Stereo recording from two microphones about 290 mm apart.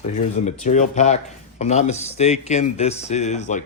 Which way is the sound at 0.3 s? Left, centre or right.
Left.